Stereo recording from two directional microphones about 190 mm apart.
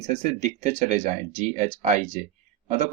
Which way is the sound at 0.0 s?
35° right (ahead or behind).